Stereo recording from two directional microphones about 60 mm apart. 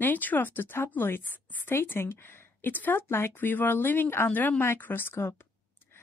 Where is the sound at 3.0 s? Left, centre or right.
Left.